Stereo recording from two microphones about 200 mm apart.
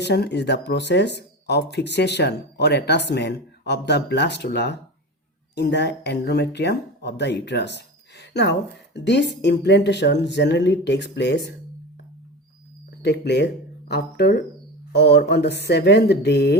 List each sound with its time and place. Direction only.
0.0 s speech: 55° left (ahead or behind)
13.0 s speech: 55° left (ahead or behind)